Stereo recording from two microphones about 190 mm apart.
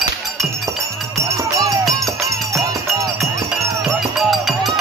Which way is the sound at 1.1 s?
15° right (ahead or behind).